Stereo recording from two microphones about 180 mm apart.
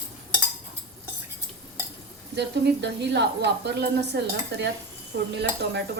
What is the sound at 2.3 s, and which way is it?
A woman's voice, 70° right (ahead or behind).